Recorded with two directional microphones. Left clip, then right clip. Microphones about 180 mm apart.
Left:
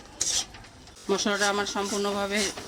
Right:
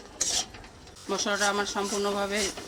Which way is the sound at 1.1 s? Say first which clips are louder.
Left 1 dB; 50° left (ahead or behind).